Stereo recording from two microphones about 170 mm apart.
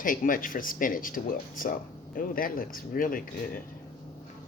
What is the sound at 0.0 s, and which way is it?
Speech, 55° left (ahead or behind).